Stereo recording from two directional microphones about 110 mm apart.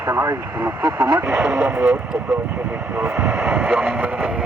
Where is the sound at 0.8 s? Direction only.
40° right (ahead or behind).